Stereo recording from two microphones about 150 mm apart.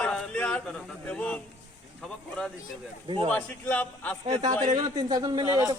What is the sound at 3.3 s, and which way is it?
Speech, 10° left (ahead or behind).